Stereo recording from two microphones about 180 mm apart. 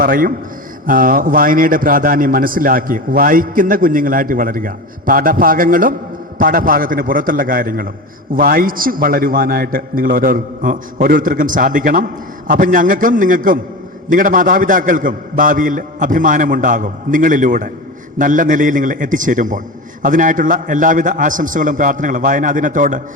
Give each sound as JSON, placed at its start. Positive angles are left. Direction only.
{"t": 0.0, "sound": "a man's voice", "side_deg": -50}